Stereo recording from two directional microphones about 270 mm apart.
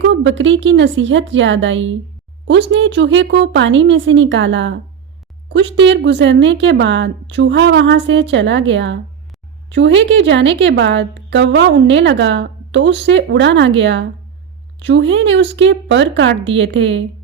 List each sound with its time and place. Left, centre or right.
0.0 s a woman's voice: right